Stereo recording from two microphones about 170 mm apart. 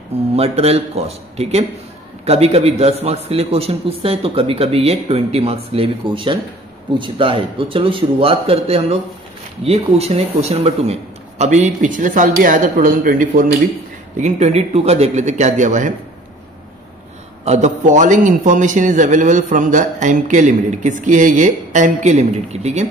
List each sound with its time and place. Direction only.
0.4 s a man's voice: 35° right (ahead or behind)
17.5 s a man's voice: 45° right (ahead or behind)